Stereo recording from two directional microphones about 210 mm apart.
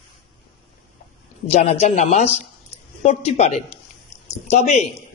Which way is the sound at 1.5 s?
30° left (ahead or behind).